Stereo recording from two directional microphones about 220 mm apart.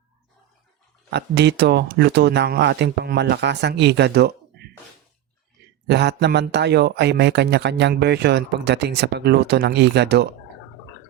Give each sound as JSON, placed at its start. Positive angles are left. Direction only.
{"t": 1.1, "sound": "speech", "side_deg": -50}
{"t": 5.9, "sound": "speech", "side_deg": -50}